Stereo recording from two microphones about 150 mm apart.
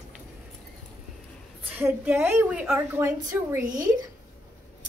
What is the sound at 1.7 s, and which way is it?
A woman's voice, 10° right (ahead or behind).